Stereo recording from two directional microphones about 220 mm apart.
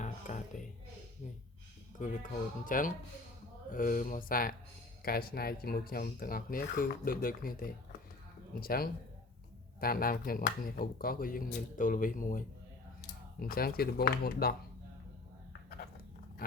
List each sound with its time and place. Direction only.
0.0 s music: 35° left (ahead or behind)
2.0 s speech: 35° left (ahead or behind)